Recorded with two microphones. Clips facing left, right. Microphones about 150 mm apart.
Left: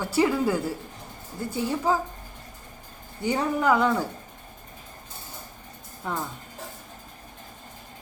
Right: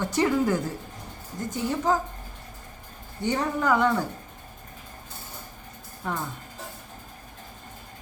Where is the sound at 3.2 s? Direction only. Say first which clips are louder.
Left 2 dB; 10° left (ahead or behind).